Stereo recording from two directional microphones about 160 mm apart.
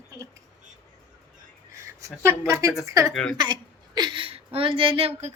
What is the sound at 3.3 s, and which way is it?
Speech, 25° right (ahead or behind).